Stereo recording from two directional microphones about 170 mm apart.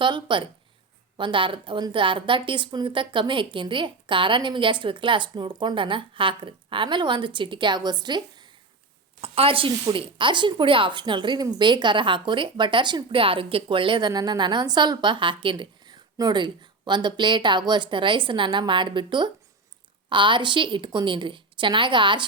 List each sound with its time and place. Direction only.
0.0 s speech: 30° right (ahead or behind)
9.2 s speech: 35° right (ahead or behind)